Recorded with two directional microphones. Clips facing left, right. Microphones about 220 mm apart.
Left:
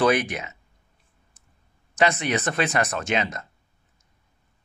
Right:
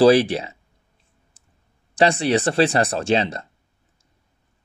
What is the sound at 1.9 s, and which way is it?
Speech, 30° right (ahead or behind).